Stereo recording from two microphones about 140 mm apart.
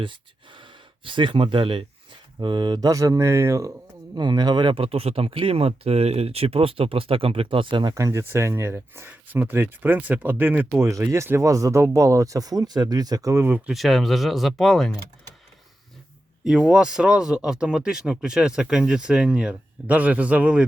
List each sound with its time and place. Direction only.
0.0 s speech: 35° right (ahead or behind); by 3.7 s 20° right (ahead or behind)
4.1 s speech: 30° right (ahead or behind)
7.9 s speech: 20° right (ahead or behind)
13.7 s speech: centre (ahead or behind)
16.4 s speech: 5° right (ahead or behind)